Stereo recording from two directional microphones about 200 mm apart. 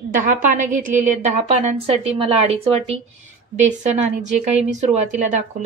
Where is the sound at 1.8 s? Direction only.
30° right (ahead or behind).